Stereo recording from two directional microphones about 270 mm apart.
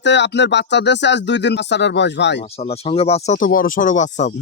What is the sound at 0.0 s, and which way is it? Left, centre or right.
Speech, left.